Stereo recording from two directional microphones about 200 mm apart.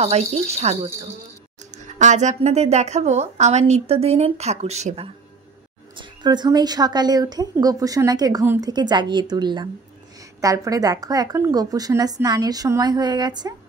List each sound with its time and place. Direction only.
0.0 s a woman's voice: 35° right (ahead or behind)
5.9 s a woman's voice: 20° right (ahead or behind)